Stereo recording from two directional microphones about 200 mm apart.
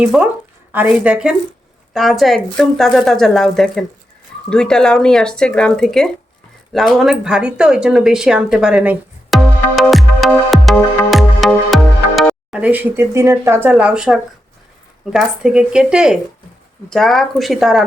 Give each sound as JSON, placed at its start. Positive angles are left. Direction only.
{"t": 0.0, "sound": "a woman's voice", "side_deg": -5}
{"t": 6.7, "sound": "a sound", "side_deg": 0}
{"t": 15.1, "sound": "speech", "side_deg": -5}